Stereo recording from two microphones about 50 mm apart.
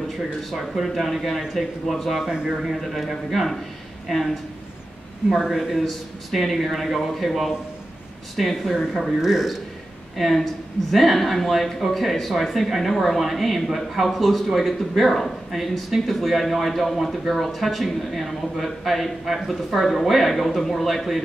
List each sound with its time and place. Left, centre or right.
0.5 s speech: centre
2.3 s speech: centre
2.7 s speech: centre
5.3 s speech: centre
8.7 s speech: centre